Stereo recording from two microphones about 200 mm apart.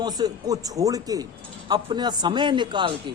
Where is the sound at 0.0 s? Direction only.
20° right (ahead or behind).